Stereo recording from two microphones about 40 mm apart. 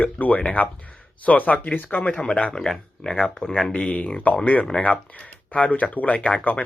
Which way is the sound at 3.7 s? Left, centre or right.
Left.